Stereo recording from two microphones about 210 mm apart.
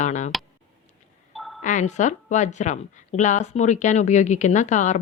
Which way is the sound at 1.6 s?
35° left (ahead or behind).